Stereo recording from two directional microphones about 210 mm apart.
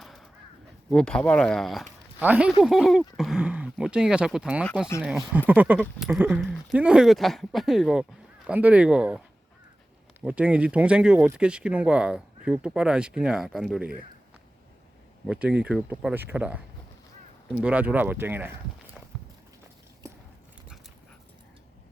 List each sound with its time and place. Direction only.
0.0 s a sound: centre (ahead or behind)
0.9 s speech: 5° left (ahead or behind)
15.3 s speech: 5° right (ahead or behind)
17.6 s speech: 5° right (ahead or behind)